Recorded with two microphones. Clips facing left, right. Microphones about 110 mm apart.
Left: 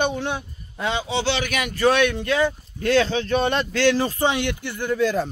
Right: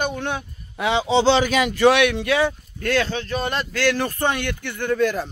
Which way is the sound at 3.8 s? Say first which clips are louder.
Left 1 dB; 10° left (ahead or behind).